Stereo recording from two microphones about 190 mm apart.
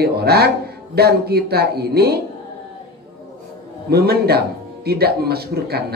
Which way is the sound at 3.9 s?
55° right (ahead or behind).